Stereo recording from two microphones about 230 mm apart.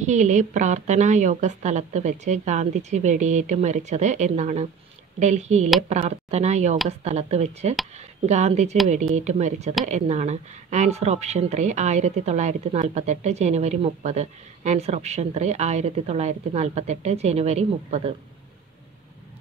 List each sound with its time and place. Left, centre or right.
0.0 s speech: right